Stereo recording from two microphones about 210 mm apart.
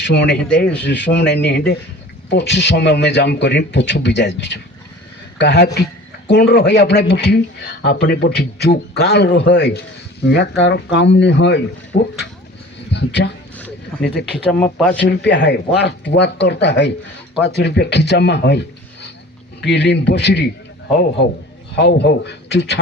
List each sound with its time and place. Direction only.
0.0 s speech: 55° left (ahead or behind)
0.4 s speech: 5° left (ahead or behind)
0.8 s speech: 55° left (ahead or behind)
12.9 s a sound: 55° left (ahead or behind)
13.9 s speech: 5° left (ahead or behind)
15.0 s speech: 55° left (ahead or behind)
19.6 s speech: 55° left (ahead or behind)
21.8 s speech: 55° left (ahead or behind)